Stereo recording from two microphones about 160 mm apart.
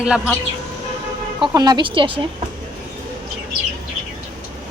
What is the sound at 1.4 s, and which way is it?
Speech, 25° right (ahead or behind).